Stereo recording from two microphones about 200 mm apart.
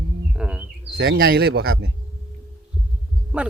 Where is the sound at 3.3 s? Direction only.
5° right (ahead or behind).